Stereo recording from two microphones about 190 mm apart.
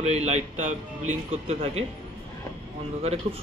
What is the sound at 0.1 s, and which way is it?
A man's voice, 35° right (ahead or behind).